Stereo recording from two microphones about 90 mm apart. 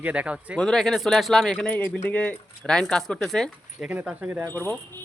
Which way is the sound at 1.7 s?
15° left (ahead or behind).